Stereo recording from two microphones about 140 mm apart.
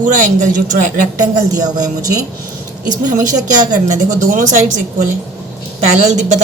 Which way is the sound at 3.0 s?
65° right (ahead or behind).